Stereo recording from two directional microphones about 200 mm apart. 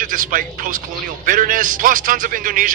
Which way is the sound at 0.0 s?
45° right (ahead or behind).